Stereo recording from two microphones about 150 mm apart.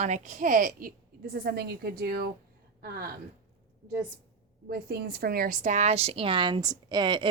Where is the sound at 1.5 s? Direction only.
90° right.